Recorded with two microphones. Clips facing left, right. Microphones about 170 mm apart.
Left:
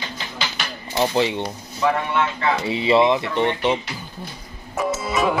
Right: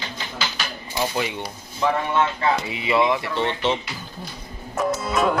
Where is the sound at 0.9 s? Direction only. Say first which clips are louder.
Left 5 dB; 25° left (ahead or behind).